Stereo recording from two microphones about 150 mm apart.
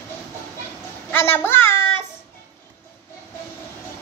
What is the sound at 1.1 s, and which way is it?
Child singing, 15° left (ahead or behind).